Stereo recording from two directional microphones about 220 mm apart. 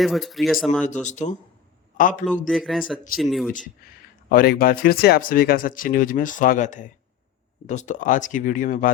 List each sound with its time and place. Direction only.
0.0 s speech: centre (ahead or behind)
0.9 s speech: 35° left (ahead or behind)
2.5 s speech: centre (ahead or behind)
4.3 s speech: 40° left (ahead or behind)